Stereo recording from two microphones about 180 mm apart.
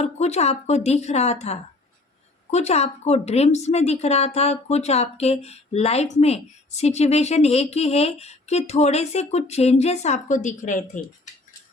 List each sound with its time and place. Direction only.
0.0 s a woman's voice: 35° left (ahead or behind)